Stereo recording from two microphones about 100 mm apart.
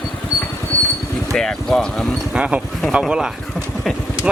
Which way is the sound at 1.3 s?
5° left (ahead or behind).